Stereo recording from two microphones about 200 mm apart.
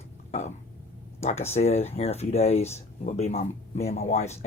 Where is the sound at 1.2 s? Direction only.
30° left (ahead or behind).